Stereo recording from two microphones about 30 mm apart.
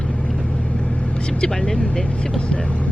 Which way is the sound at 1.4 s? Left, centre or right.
Left.